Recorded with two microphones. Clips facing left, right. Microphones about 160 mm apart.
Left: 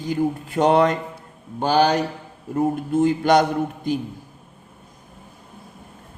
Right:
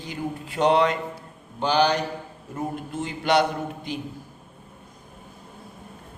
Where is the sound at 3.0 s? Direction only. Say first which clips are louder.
Left 6 dB; 45° left (ahead or behind).